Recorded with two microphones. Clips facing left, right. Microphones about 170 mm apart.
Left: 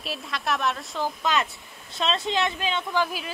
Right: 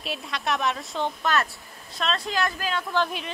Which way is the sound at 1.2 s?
15° left (ahead or behind).